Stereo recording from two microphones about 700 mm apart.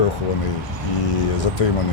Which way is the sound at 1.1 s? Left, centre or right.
Left.